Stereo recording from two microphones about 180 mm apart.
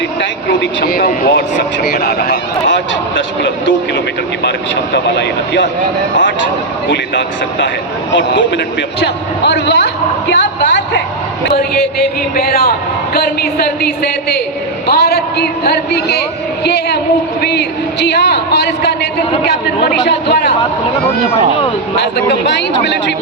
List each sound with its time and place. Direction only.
0.2 s a man's voice: 75° left (ahead or behind)
0.9 s speech: 50° left (ahead or behind); by 3.8 s 90° left
6.8 s speech: 90° left
9.4 s a man's voice: 75° left (ahead or behind)
12.4 s a man's voice: 60° left (ahead or behind)
22.0 s a man's voice: 75° left (ahead or behind)